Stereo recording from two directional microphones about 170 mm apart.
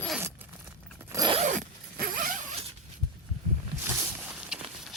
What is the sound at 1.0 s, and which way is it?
Zipper, 15° right (ahead or behind).